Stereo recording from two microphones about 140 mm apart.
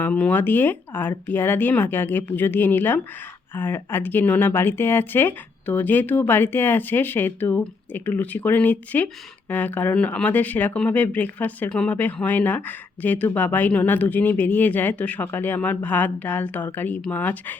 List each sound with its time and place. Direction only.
0.0 s speech: 10° left (ahead or behind)